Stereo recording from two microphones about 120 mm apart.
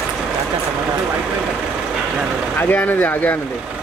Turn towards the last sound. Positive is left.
turn(degrees=15)  # may be behind; listen again after turning